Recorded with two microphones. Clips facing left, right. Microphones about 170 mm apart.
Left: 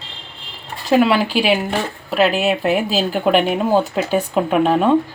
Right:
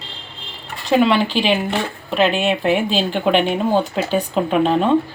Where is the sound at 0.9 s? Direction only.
5° left (ahead or behind).